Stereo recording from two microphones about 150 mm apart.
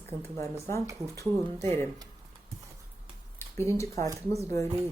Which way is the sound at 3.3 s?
15° left (ahead or behind).